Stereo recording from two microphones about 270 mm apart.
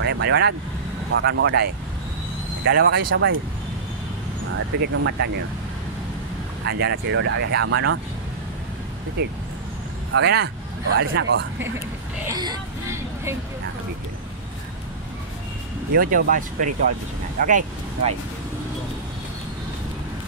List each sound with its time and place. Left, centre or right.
0.0 s speech: right
4.5 s speech: right
6.6 s speech: right
10.1 s speech: right
12.3 s vehicle: centre
15.9 s speech: right